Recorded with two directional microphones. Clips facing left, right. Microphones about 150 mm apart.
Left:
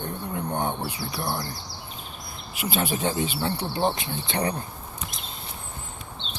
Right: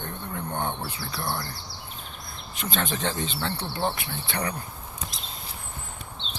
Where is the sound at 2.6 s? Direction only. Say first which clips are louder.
Left 3 dB; 10° left (ahead or behind); by 4.5 s 25° left (ahead or behind).